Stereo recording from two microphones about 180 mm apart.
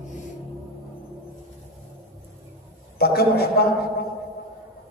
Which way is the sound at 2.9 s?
60° left (ahead or behind).